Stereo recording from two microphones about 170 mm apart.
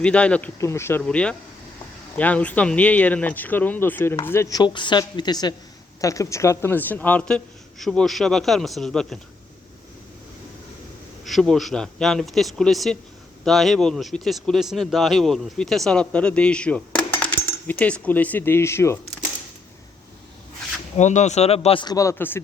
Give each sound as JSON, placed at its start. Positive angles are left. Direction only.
{"t": 0.0, "sound": "speech", "side_deg": 5}
{"t": 11.3, "sound": "speech", "side_deg": 0}
{"t": 20.9, "sound": "speech", "side_deg": 45}